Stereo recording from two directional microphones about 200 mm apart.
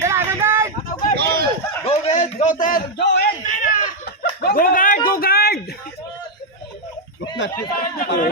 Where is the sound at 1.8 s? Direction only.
35° left (ahead or behind); by 3.3 s 55° left (ahead or behind).